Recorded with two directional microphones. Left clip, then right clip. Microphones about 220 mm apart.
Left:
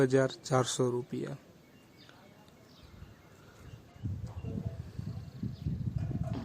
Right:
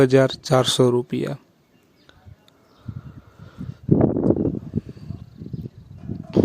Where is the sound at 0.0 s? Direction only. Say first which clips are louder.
Right 12 dB; 35° right (ahead or behind).